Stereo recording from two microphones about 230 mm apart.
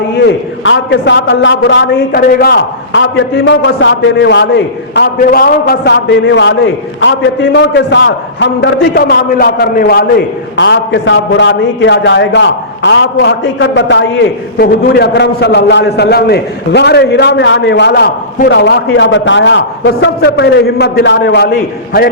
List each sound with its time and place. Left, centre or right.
0.2 s a man's voice: left